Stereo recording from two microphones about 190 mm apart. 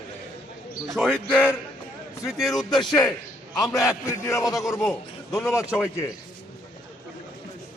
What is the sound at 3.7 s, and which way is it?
A man's voice, 15° left (ahead or behind).